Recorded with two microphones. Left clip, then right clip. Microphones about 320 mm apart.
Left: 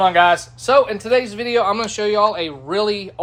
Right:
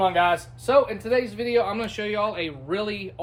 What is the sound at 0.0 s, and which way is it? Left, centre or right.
Speech, left.